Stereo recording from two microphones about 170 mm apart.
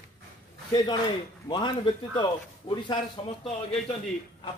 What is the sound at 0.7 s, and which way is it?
A man's voice, 25° left (ahead or behind).